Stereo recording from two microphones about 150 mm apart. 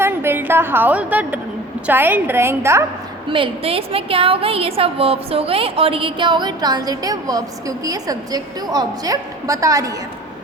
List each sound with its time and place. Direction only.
0.0 s a woman's voice: 15° right (ahead or behind)
3.2 s a woman's voice: 35° right (ahead or behind)